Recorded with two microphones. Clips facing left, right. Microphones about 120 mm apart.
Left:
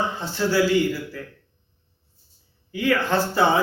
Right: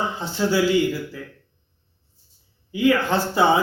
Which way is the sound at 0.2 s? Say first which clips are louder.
Right 2 dB; 15° right (ahead or behind).